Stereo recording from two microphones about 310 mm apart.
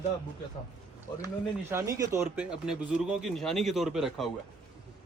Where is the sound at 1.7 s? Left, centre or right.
Centre.